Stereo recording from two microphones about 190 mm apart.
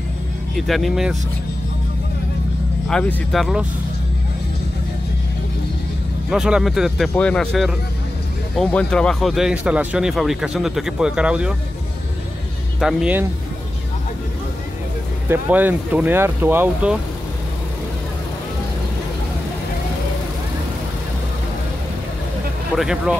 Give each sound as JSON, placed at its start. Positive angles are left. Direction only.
{"t": 0.6, "sound": "speech", "side_deg": 0}
{"t": 2.9, "sound": "speech", "side_deg": 5}
{"t": 6.3, "sound": "speech", "side_deg": -5}
{"t": 12.8, "sound": "speech", "side_deg": -5}
{"t": 15.2, "sound": "speech", "side_deg": -10}
{"t": 22.8, "sound": "speech", "side_deg": -5}